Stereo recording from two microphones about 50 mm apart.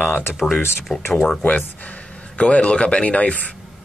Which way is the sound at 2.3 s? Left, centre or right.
Left.